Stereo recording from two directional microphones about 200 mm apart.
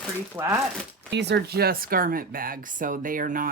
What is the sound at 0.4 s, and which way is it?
Speech, 10° right (ahead or behind).